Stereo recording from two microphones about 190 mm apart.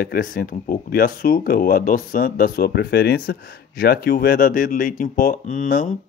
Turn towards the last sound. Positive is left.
turn(degrees=45)  # may be behind; listen again after turning